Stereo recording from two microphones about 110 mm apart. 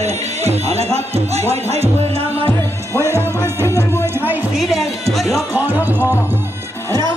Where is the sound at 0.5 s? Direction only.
70° right (ahead or behind).